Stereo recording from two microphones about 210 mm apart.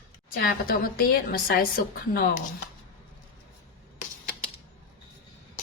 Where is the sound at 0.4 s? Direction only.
45° left (ahead or behind).